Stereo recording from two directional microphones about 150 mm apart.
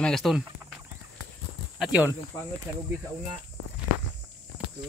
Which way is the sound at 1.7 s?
5° right (ahead or behind).